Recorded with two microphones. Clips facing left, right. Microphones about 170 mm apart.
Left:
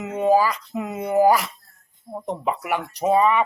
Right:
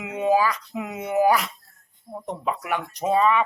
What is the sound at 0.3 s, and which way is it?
Speech, 10° left (ahead or behind).